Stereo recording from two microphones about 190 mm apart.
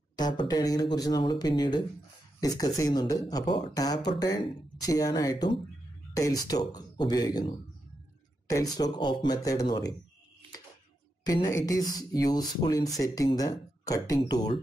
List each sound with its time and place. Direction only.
0.1 s speech: 20° left (ahead or behind)
8.5 s speech: 20° left (ahead or behind)
11.2 s speech: 20° left (ahead or behind)